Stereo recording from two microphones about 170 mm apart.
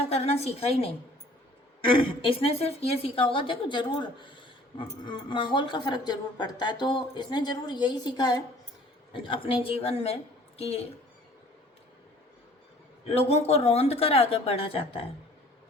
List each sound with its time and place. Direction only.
0.1 s a woman's voice: 35° left (ahead or behind)
13.1 s speech: 40° left (ahead or behind)